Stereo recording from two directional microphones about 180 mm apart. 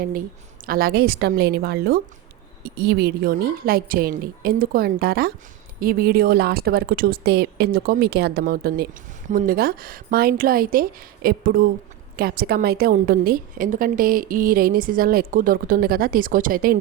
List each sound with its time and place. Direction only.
0.6 s a woman's voice: 55° right (ahead or behind)